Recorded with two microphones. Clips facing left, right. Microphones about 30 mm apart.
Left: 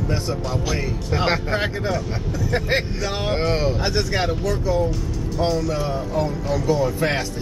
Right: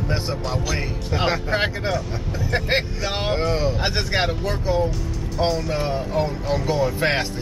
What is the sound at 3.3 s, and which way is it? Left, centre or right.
Speech, centre.